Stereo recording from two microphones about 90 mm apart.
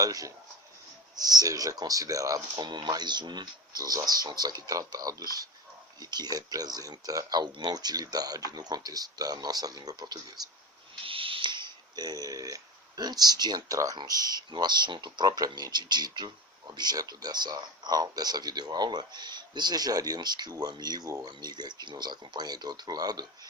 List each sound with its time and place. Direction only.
0.0 s speech: 40° right (ahead or behind)
2.6 s speech: 55° right (ahead or behind)
11.0 s a sound: 80° right; by 13.7 s 50° right (ahead or behind)
13.7 s speech: 45° right (ahead or behind)
14.5 s speech: 55° right (ahead or behind)
21.2 s speech: 55° right (ahead or behind)